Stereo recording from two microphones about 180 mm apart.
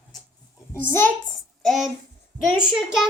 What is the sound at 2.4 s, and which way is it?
Speech, 5° right (ahead or behind).